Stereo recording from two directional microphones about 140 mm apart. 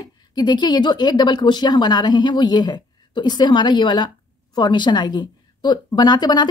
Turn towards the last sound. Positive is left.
turn(degrees=30)  # may be behind; listen again after turning